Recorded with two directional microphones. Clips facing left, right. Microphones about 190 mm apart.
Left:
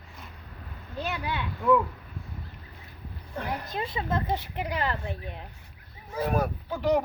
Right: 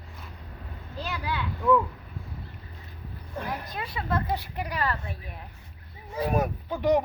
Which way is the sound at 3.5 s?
25° left (ahead or behind).